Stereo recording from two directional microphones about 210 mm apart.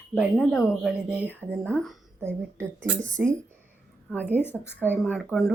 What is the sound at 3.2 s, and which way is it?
Speech, 5° right (ahead or behind).